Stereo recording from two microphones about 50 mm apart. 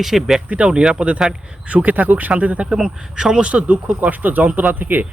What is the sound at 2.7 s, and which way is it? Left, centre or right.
Speech, centre.